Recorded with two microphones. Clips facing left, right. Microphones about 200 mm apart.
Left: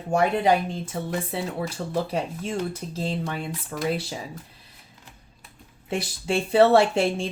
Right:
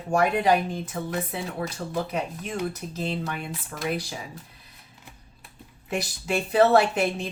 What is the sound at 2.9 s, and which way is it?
Speech, 30° left (ahead or behind).